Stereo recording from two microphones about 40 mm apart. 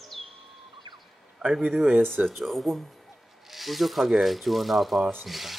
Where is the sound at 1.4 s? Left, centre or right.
Centre.